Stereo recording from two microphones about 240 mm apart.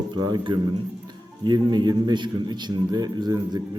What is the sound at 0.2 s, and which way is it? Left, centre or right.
A man's voice, centre.